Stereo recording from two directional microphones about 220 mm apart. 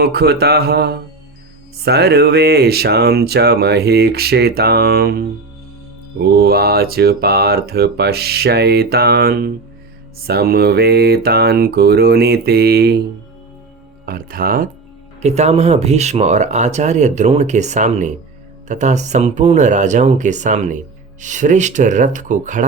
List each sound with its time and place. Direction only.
0.0 s speech: 45° right (ahead or behind)
14.0 s speech: 40° right (ahead or behind)